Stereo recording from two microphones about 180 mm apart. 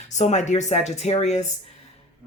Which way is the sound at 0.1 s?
40° left (ahead or behind).